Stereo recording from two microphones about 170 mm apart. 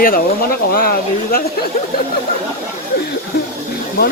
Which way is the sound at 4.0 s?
65° left (ahead or behind).